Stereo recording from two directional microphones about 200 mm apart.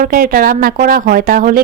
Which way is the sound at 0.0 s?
45° right (ahead or behind).